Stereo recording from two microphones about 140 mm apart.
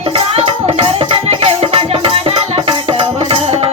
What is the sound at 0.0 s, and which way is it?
Music, 45° right (ahead or behind).